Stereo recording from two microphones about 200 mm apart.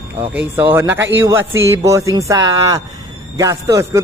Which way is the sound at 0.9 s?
65° right (ahead or behind).